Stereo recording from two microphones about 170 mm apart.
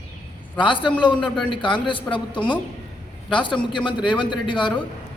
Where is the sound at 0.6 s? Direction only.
30° left (ahead or behind).